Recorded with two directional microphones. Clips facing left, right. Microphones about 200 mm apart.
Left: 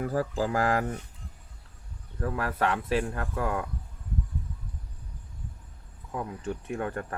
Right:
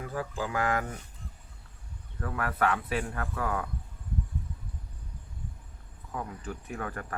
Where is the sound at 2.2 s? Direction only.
30° left (ahead or behind).